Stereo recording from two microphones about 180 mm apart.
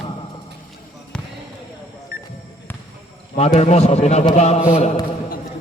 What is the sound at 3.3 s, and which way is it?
A man's voice, 35° left (ahead or behind).